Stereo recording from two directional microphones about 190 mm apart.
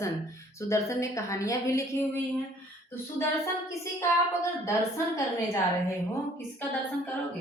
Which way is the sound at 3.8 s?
15° left (ahead or behind).